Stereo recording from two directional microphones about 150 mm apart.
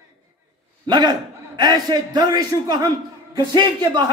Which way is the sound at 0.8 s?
30° right (ahead or behind).